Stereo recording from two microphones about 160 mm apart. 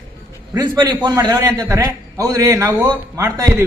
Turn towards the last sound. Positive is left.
turn(degrees=-15)  # may be behind; listen again after turning